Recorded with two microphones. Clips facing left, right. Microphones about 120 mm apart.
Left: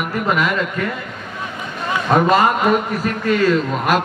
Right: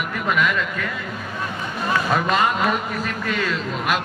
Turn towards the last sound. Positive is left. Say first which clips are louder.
# left 7 dB
turn(degrees=45)  # may be behind; listen again after turning